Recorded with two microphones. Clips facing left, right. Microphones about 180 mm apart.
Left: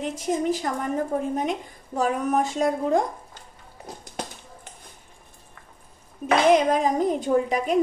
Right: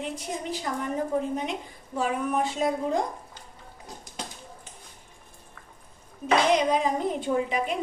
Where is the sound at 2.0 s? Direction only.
40° left (ahead or behind).